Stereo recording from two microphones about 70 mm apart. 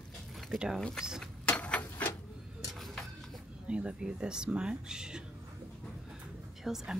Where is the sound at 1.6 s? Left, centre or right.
Left.